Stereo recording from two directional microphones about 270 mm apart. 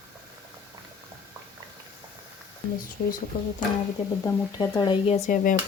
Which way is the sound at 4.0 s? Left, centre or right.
Left.